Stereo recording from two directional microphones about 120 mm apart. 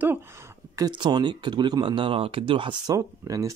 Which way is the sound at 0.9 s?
40° right (ahead or behind).